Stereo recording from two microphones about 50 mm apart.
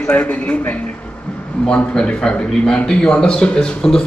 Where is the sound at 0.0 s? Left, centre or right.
Left.